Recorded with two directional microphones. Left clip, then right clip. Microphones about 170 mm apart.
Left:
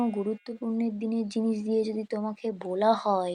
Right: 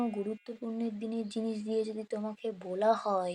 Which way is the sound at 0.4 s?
15° left (ahead or behind).